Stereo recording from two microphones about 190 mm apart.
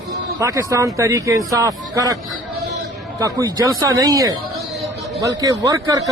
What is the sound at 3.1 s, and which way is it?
Speech, 15° right (ahead or behind).